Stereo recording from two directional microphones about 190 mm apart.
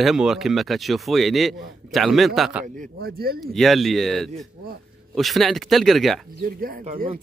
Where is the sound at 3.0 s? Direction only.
55° right (ahead or behind).